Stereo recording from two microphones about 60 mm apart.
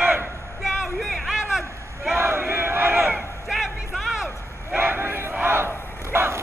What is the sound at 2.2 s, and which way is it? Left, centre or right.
Battle cry, right.